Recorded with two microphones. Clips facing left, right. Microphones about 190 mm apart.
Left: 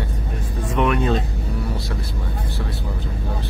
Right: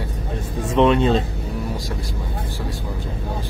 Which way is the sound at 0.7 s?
25° right (ahead or behind).